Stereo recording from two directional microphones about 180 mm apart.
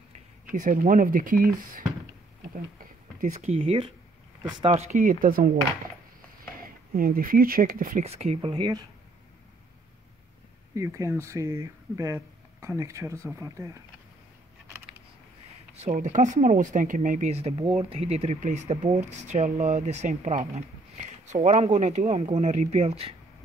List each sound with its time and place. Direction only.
0.5 s speech: 45° right (ahead or behind)
2.4 s a sound: 50° right (ahead or behind); by 3.9 s 30° right (ahead or behind)
4.4 s speech: 25° right (ahead or behind)
4.9 s speech: 50° right (ahead or behind)
6.6 s speech: 55° right (ahead or behind); by 8.8 s 25° right (ahead or behind)
10.7 s speech: 15° right (ahead or behind)
15.8 s speech: 45° right (ahead or behind)